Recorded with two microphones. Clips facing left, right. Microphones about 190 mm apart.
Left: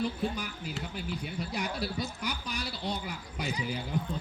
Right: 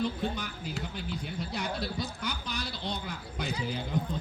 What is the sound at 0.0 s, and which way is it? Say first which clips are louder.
Speech: even; 10° left (ahead or behind).